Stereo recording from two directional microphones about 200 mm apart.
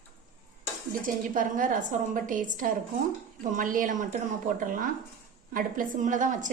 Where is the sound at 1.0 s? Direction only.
40° right (ahead or behind).